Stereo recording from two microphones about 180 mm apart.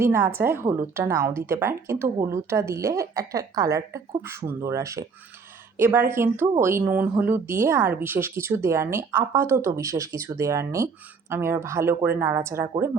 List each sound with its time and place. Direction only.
0.0 s a woman's voice: 15° right (ahead or behind)